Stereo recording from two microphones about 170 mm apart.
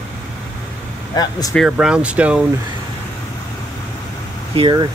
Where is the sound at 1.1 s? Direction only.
25° left (ahead or behind).